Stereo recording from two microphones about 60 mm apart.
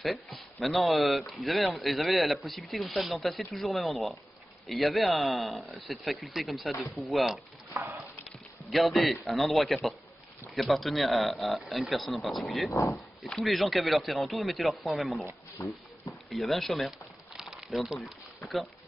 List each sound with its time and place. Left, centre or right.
0.0 s speech: centre
7.7 s a sound: right
8.6 s speech: centre
16.3 s crumpling: centre